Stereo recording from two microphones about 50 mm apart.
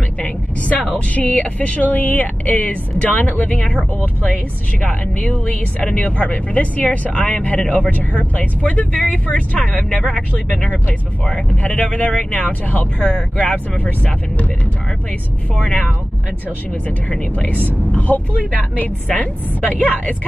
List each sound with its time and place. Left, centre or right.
0.2 s a woman's voice: left
4.8 s speech: left
11.5 s speech: left
13.0 s speech: centre
13.7 s speech: left
15.5 s speech: centre
17.1 s speech: centre
17.6 s speech: left